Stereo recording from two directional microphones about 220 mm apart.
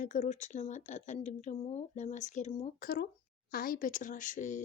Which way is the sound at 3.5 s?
40° left (ahead or behind).